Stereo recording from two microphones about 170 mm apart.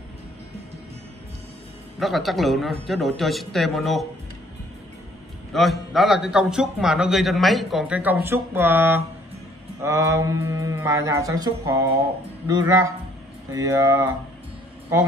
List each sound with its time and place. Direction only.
2.0 s a man's voice: centre (ahead or behind)
5.5 s a man's voice: centre (ahead or behind); by 14.1 s 20° right (ahead or behind)